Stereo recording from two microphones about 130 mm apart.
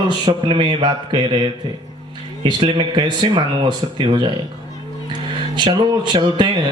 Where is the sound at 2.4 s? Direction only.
40° right (ahead or behind).